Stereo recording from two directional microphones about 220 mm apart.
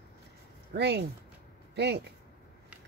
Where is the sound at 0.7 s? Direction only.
50° right (ahead or behind).